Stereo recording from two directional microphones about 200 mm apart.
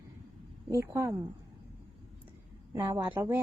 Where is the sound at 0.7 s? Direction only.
15° right (ahead or behind).